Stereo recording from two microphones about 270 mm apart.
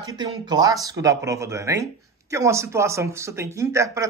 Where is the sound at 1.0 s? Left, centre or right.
Centre.